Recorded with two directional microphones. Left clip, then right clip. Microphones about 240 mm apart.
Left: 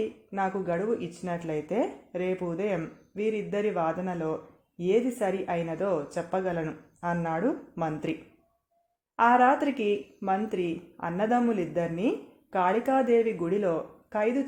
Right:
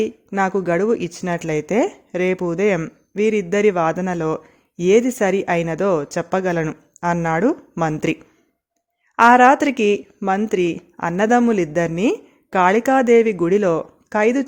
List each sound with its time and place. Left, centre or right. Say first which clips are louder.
0.0 s speech: right 10 dB; right
9.1 s speech: right 10 dB; right